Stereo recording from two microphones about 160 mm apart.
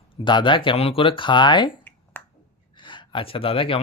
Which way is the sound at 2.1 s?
10° left (ahead or behind).